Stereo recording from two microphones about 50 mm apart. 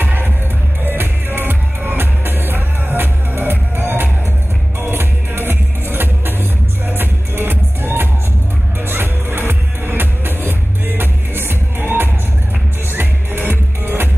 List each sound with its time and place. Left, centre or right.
0.0 s music: right